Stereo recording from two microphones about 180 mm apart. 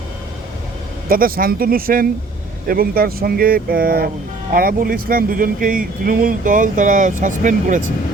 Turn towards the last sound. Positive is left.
turn(degrees=-45)  # may be behind; listen again after turning